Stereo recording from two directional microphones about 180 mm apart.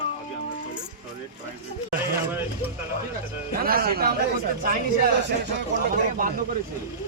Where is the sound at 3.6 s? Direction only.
55° right (ahead or behind).